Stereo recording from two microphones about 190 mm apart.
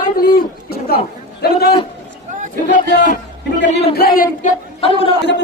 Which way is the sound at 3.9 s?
50° left (ahead or behind).